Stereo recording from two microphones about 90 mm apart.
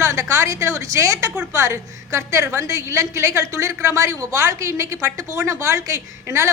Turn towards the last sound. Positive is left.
turn(degrees=-35)  # may be behind; listen again after turning